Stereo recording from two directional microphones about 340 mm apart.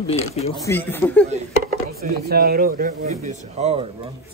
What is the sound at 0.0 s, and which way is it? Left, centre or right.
Speech, centre.